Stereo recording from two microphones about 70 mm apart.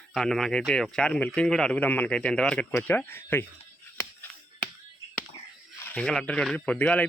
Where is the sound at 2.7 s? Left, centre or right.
Left.